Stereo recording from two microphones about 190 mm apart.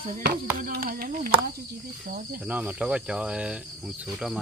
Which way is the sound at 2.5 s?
10° right (ahead or behind).